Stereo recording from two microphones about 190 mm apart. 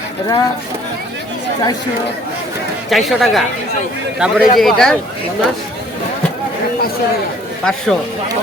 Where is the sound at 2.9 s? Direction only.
Centre (ahead or behind).